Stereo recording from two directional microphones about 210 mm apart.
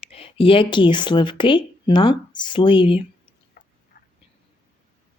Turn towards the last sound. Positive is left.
turn(degrees=40)  # may be behind; listen again after turning